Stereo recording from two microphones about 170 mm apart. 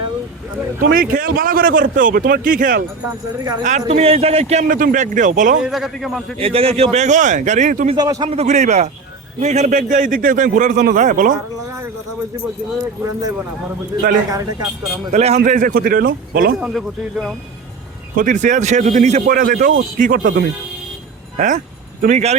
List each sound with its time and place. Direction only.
0.9 s a man's voice: 55° right (ahead or behind); by 4.6 s 40° right (ahead or behind)
4.7 s speech: 55° right (ahead or behind)
5.6 s speech: centre (ahead or behind)
6.4 s speech: 35° right (ahead or behind)
7.9 s speech: 20° right (ahead or behind)
8.3 s speech: 40° right (ahead or behind)
14.3 s speech: 20° right (ahead or behind)
15.1 s a man's voice: 40° right (ahead or behind); by 16.6 s 60° right (ahead or behind)
16.6 s speech: centre (ahead or behind)
18.2 s speech: 45° right (ahead or behind)
19.2 s a man's voice: 55° right (ahead or behind)
21.3 s speech: 45° right (ahead or behind)